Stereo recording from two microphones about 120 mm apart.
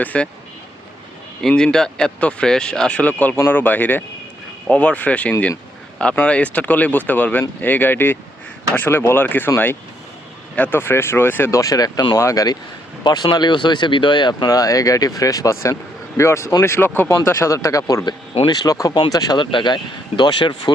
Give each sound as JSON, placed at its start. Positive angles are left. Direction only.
{"t": 0.0, "sound": "speech", "side_deg": 10}
{"t": 1.4, "sound": "speech", "side_deg": 5}
{"t": 10.5, "sound": "speech", "side_deg": 15}